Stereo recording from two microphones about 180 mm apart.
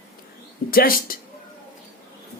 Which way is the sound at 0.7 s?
55° left (ahead or behind).